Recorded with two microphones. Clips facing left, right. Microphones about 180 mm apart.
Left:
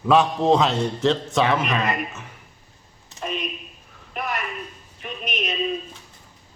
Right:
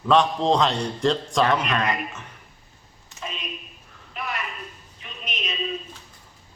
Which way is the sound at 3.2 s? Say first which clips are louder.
Left 6 dB; 55° left (ahead or behind).